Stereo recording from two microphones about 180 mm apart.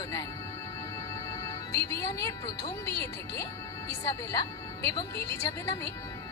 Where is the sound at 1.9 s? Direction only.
15° left (ahead or behind).